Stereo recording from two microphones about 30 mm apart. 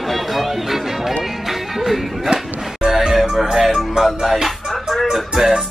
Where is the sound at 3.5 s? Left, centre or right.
Centre.